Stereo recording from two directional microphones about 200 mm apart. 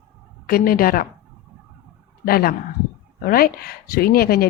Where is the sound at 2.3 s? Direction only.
50° left (ahead or behind).